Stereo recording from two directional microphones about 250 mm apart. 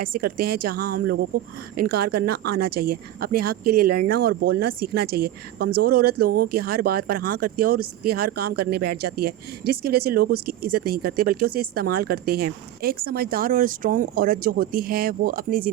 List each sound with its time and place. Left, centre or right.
0.0 s speech: right